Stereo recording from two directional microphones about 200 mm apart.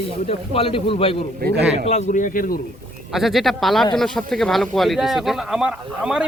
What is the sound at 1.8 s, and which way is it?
Speech, 35° left (ahead or behind).